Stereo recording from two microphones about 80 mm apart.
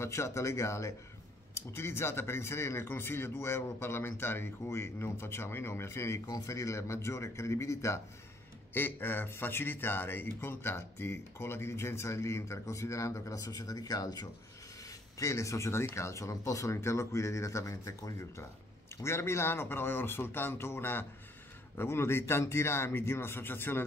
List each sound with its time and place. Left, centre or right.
0.0 s a man's voice: left
6.2 s a man's voice: left
8.7 s a man's voice: left